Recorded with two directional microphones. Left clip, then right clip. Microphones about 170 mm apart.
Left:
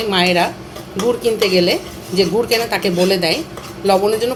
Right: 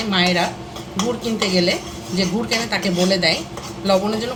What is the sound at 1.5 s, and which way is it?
Speech, 40° left (ahead or behind).